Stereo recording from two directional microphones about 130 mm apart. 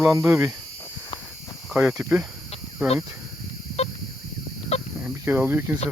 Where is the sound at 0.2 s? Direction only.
20° right (ahead or behind).